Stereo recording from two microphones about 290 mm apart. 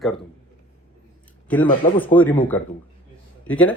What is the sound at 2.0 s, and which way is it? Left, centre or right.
Speech, centre.